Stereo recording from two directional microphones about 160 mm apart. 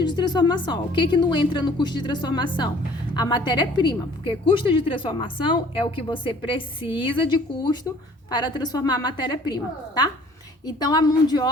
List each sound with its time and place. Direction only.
0.0 s a woman's voice: 25° left (ahead or behind)